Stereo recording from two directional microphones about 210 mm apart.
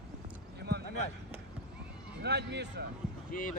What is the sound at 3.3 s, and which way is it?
Speech, 40° left (ahead or behind).